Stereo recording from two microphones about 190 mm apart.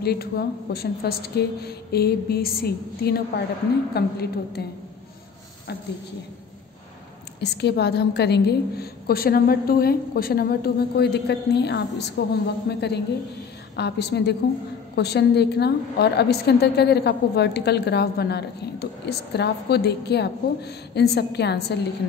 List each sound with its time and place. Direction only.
0.0 s a woman's voice: 55° left (ahead or behind)
7.3 s a woman's voice: 60° left (ahead or behind)